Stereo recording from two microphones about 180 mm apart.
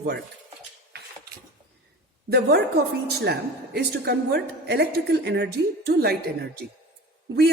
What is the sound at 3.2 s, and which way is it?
A woman's voice, 65° right (ahead or behind).